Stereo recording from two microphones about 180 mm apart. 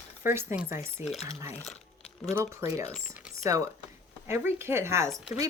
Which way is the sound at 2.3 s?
15° right (ahead or behind).